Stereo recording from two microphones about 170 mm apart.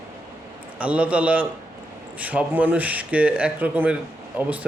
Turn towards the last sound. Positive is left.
turn(degrees=-10)  # may be behind; listen again after turning